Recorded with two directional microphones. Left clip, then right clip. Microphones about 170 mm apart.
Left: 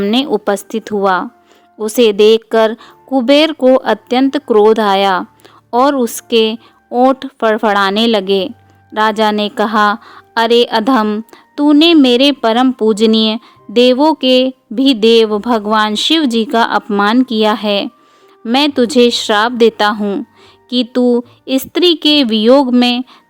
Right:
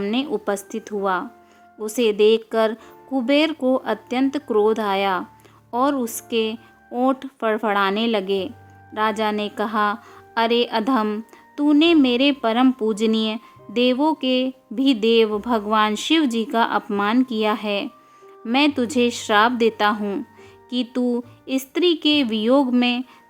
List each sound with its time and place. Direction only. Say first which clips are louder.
0.0 s a woman's voice: left 10 dB; 40° left (ahead or behind)